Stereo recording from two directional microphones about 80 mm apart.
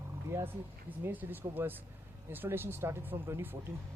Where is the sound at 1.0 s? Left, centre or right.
Right.